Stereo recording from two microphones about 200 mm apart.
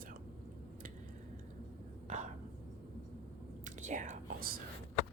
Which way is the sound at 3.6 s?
40° right (ahead or behind).